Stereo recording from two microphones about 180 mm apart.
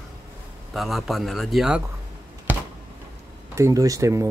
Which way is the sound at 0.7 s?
Centre (ahead or behind).